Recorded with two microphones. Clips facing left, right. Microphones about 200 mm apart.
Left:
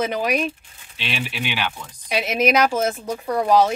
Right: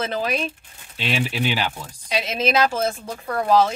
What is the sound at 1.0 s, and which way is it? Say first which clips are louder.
Speech: right 4 dB; 40° right (ahead or behind).